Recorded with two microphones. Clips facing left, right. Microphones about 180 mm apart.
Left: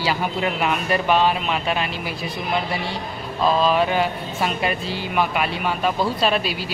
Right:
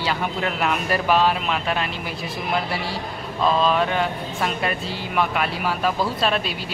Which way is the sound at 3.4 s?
5° left (ahead or behind).